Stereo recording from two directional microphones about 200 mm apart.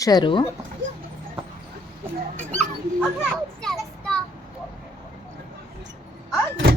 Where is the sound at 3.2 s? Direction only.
Centre (ahead or behind).